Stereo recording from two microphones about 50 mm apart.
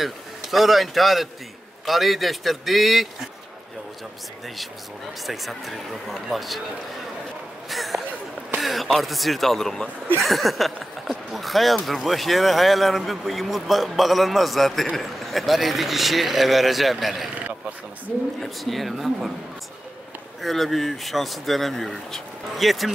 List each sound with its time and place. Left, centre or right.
0.0 s speech: centre
5.2 s speech: centre
7.7 s a sound: centre
8.5 s speech: centre
18.4 s speech: centre
20.4 s speech: centre